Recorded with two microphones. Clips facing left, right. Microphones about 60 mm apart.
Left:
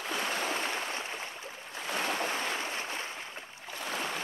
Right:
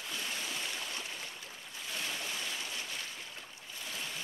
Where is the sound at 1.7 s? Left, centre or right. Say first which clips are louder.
Left 8 dB; left.